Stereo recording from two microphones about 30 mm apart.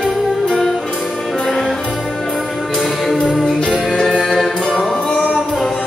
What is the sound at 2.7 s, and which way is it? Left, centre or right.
Music, centre.